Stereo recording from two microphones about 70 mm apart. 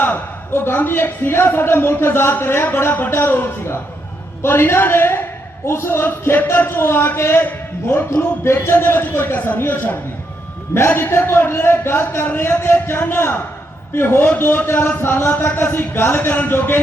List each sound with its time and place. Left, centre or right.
0.0 s a man's voice: left